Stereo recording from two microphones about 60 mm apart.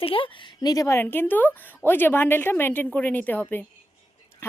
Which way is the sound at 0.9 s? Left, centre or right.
Left.